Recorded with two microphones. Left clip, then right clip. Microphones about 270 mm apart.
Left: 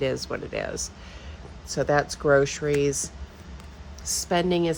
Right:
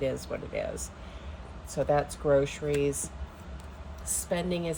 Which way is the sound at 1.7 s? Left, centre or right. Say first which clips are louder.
Left 4 dB; left.